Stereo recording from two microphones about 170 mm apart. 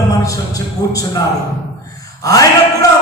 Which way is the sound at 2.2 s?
20° left (ahead or behind).